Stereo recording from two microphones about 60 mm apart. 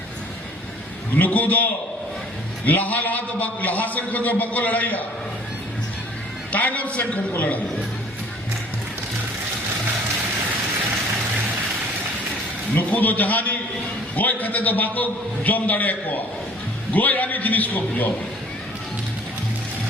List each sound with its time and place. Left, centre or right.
1.1 s a man's voice: left
6.5 s a man's voice: left
12.7 s a man's voice: left